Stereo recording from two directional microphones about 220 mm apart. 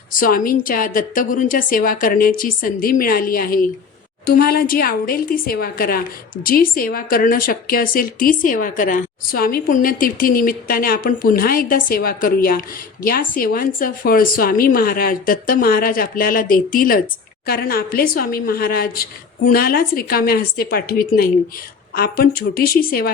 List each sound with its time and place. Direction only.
0.1 s a woman's voice: 40° left (ahead or behind)